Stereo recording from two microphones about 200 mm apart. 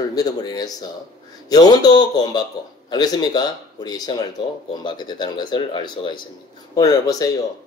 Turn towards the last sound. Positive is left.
turn(degrees=20)  # may be behind; listen again after turning